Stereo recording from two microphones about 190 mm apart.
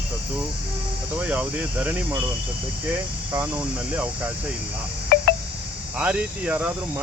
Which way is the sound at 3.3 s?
10° right (ahead or behind).